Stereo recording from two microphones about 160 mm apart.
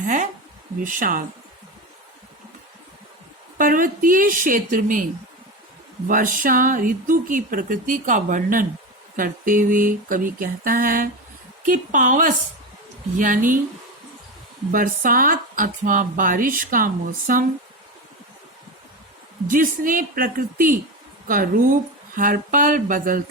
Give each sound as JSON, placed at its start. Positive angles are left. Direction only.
{"t": 0.0, "sound": "a sound", "side_deg": -55}
{"t": 0.9, "sound": "speech", "side_deg": -60}
{"t": 3.6, "sound": "speech", "side_deg": -60}
{"t": 6.1, "sound": "speech", "side_deg": -55}
{"t": 14.7, "sound": "speech", "side_deg": -60}
{"t": 19.5, "sound": "speech", "side_deg": -60}